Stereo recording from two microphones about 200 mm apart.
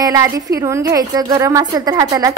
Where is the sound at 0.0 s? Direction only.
15° right (ahead or behind).